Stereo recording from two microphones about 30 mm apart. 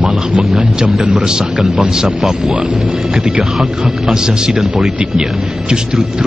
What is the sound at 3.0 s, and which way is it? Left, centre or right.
Speech, centre.